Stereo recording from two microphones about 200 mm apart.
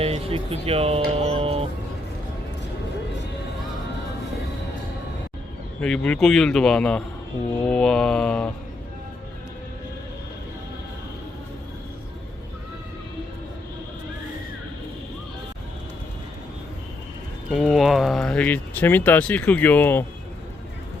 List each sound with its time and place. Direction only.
0.0 s speech: 30° right (ahead or behind)
5.8 s speech: 5° left (ahead or behind)
17.5 s speech: centre (ahead or behind)